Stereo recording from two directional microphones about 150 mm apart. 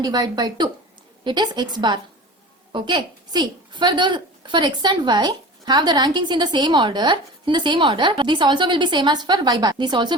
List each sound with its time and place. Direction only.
0.0 s a woman's voice: 25° right (ahead or behind)